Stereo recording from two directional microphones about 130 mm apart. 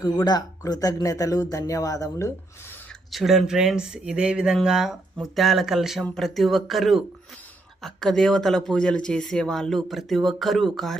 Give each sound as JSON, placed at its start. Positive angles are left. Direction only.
{"t": 0.0, "sound": "speech", "side_deg": 30}
{"t": 3.1, "sound": "speech", "side_deg": 0}